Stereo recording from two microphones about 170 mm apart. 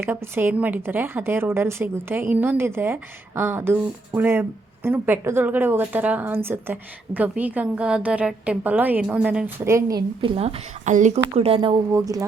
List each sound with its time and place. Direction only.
0.0 s a woman's voice: 15° right (ahead or behind)
9.6 s a woman's voice: 15° right (ahead or behind)
10.2 s speech: 35° right (ahead or behind)
11.3 s speech: 35° right (ahead or behind)
11.9 s speech: 20° right (ahead or behind)